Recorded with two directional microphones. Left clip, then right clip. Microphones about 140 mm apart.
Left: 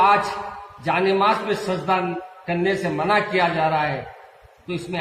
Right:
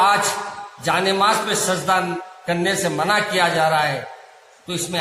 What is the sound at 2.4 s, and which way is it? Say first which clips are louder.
A man's voice: right 2 dB; 20° right (ahead or behind).